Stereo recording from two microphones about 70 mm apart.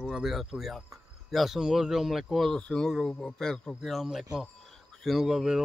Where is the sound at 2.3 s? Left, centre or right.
Centre.